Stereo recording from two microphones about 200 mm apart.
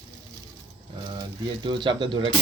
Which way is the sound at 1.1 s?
20° right (ahead or behind).